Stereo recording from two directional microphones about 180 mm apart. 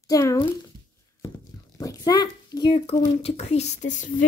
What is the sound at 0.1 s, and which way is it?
Child singing, 20° left (ahead or behind).